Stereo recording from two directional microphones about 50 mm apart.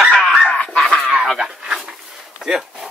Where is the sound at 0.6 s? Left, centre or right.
Centre.